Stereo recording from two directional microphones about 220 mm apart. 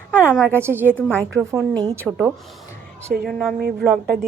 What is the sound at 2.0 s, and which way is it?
A woman's voice, 5° right (ahead or behind).